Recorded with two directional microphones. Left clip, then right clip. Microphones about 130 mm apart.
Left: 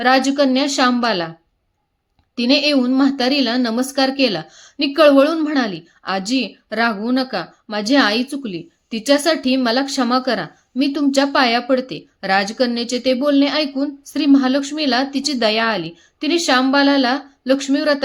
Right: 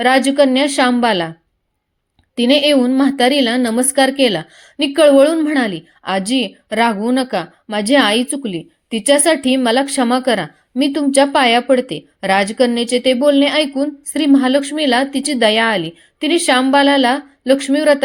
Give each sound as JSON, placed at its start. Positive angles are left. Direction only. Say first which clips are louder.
{"t": 0.0, "sound": "a woman's voice", "louder": "right 3 dB", "side_deg": -30}
{"t": 2.3, "sound": "a woman's voice", "louder": "right 4 dB", "side_deg": -30}